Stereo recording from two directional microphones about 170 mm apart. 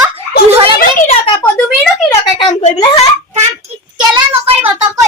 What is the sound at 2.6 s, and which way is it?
Speech, 40° left (ahead or behind).